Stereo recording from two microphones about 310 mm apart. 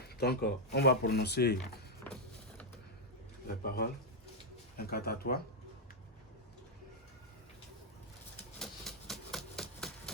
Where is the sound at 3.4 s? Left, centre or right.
Left.